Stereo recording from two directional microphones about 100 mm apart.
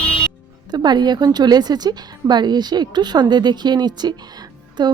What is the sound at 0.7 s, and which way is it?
Speech, 45° right (ahead or behind).